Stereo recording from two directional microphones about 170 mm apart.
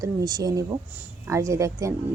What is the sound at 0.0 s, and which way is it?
A woman's voice, 20° right (ahead or behind).